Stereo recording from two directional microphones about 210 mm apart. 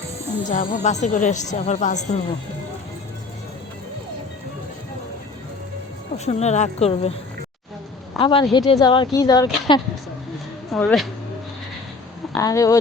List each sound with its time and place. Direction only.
0.5 s a woman's voice: 40° left (ahead or behind)
6.1 s a woman's voice: 30° left (ahead or behind)
8.2 s speech: 25° left (ahead or behind)
10.7 s speech: 5° left (ahead or behind)
12.4 s speech: 15° left (ahead or behind)